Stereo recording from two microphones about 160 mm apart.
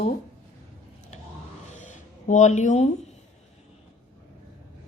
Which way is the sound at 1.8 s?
50° left (ahead or behind).